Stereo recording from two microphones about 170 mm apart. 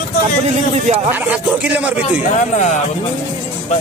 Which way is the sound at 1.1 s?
5° right (ahead or behind).